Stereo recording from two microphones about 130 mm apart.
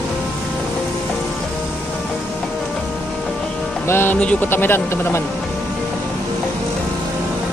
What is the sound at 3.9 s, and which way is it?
Speech, 15° left (ahead or behind).